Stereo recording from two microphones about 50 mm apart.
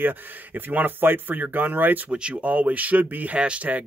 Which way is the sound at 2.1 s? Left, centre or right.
Centre.